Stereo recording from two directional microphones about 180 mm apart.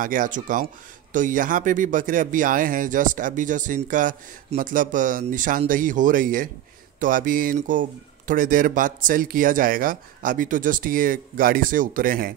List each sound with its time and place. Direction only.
0.0 s speech: 45° right (ahead or behind)